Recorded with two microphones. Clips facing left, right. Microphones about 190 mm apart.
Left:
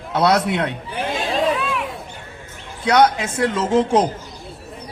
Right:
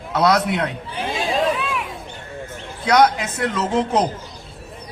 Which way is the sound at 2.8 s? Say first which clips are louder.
Even; 30° left (ahead or behind).